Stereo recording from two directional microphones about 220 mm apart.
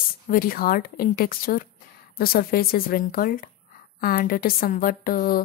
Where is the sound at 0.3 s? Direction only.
40° left (ahead or behind).